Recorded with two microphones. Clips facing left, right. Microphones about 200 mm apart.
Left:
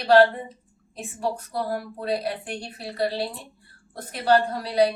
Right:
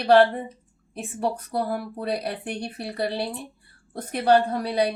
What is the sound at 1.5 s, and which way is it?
A woman's voice, 60° right (ahead or behind).